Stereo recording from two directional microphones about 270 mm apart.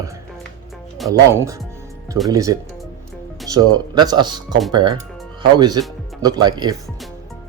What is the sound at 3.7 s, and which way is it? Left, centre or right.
Speech, centre.